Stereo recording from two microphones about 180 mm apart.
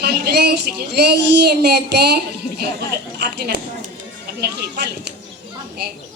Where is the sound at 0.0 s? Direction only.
65° right (ahead or behind).